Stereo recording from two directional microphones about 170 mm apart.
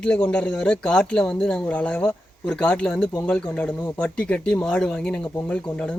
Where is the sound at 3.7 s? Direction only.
20° left (ahead or behind).